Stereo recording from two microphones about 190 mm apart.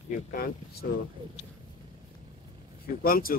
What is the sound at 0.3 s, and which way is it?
Speech, 50° left (ahead or behind).